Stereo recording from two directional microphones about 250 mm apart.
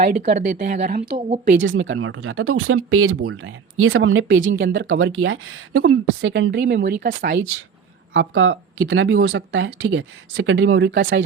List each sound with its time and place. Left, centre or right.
0.0 s speech: right
1.5 s speech: right
8.1 s speech: right